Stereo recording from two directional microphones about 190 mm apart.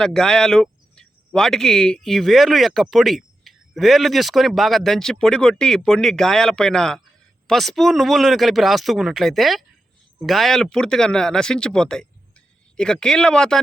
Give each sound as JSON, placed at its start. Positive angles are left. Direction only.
{"t": 0.0, "sound": "speech", "side_deg": 5}